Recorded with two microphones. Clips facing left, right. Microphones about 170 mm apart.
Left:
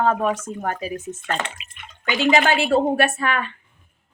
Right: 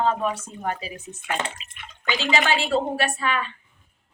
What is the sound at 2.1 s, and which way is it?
A woman's voice, 50° left (ahead or behind).